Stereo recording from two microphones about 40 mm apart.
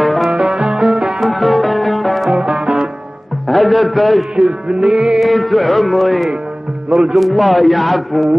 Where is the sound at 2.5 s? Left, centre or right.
Right.